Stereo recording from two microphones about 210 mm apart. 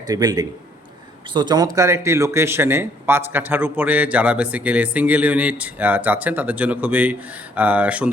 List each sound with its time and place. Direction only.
0.1 s speech: 20° right (ahead or behind)